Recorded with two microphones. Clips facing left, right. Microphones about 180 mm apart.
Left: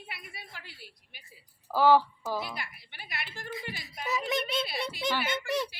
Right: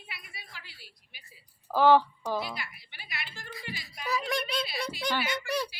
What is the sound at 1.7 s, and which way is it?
Speech, 10° left (ahead or behind).